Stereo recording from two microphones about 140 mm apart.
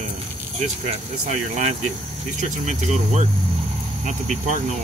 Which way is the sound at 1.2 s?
55° right (ahead or behind).